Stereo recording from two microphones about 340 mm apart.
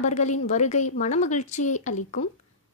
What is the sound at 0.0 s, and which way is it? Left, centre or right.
A woman's voice, left.